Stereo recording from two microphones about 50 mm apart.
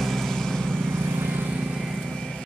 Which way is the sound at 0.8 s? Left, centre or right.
Right.